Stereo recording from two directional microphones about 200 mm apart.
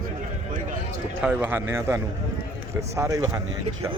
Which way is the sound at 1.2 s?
10° right (ahead or behind).